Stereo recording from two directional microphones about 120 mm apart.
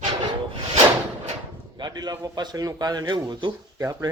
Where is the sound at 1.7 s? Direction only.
35° right (ahead or behind).